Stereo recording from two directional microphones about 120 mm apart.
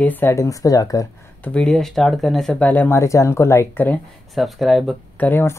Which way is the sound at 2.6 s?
15° left (ahead or behind).